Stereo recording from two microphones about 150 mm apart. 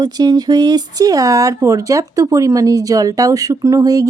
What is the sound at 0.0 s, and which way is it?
Speech, 25° right (ahead or behind).